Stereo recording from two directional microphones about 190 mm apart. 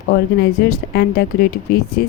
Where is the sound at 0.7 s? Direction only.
55° left (ahead or behind).